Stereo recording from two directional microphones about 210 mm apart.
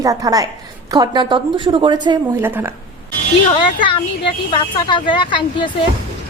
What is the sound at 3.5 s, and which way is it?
Speech, 25° left (ahead or behind).